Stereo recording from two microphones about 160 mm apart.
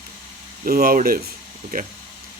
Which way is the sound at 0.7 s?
65° right (ahead or behind).